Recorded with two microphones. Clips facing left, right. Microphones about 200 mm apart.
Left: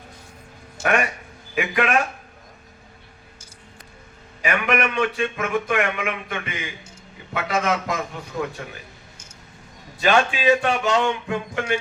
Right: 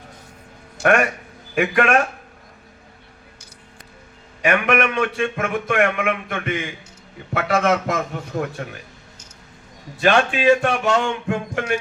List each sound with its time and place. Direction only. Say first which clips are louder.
0.9 s speech: right 5 dB; 50° right (ahead or behind)
4.4 s speech: right 4 dB; 50° right (ahead or behind)
10.0 s speech: right 2 dB; 45° right (ahead or behind)